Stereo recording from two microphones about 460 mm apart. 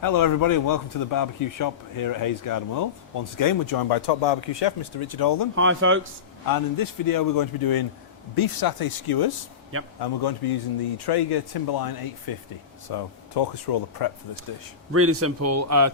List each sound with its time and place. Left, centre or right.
0.0 s a man's voice: left
5.5 s speech: right
6.4 s a man's voice: left
14.9 s a man's voice: right